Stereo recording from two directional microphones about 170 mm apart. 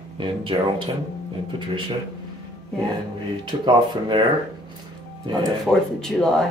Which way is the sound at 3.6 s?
25° right (ahead or behind).